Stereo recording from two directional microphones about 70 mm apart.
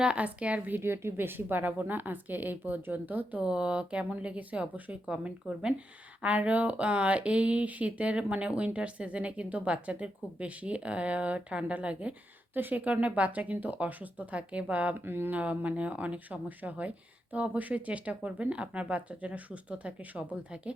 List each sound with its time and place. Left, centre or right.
0.0 s speech: centre
0.8 s speech: right
3.4 s speech: centre
14.9 s speech: right
15.4 s speech: right